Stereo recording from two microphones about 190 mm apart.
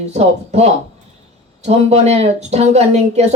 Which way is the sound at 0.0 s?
35° right (ahead or behind).